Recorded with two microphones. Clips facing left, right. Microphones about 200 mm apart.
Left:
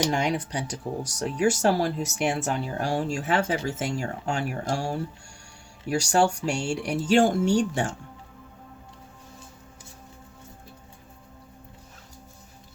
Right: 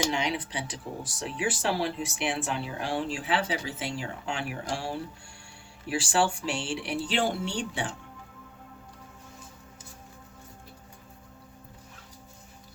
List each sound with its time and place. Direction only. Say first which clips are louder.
0.1 s speech: left 4 dB; 45° left (ahead or behind)